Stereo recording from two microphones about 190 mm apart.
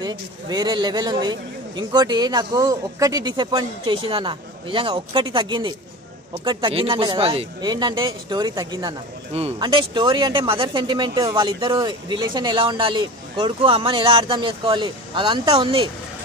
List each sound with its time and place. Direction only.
0.0 s speech: 20° right (ahead or behind)